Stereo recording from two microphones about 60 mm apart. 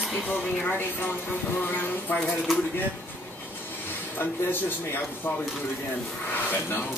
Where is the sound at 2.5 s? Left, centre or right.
Centre.